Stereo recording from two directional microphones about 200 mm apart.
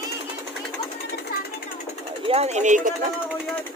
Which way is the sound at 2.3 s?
30° right (ahead or behind).